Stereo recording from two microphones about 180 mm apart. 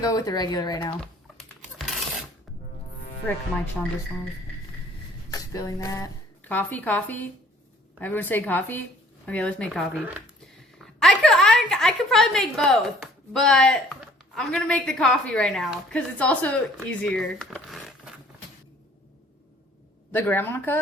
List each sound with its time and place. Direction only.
0.0 s speech: 20° left (ahead or behind)
5.3 s a woman's voice: 20° left (ahead or behind); by 10.0 s centre (ahead or behind)
11.0 s a woman's voice: centre (ahead or behind)
20.1 s a woman's voice: 10° left (ahead or behind)